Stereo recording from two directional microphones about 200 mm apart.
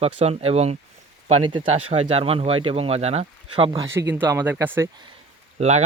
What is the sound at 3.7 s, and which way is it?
Speech, 15° right (ahead or behind).